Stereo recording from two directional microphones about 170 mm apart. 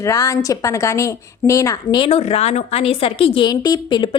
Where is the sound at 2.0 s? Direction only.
35° left (ahead or behind).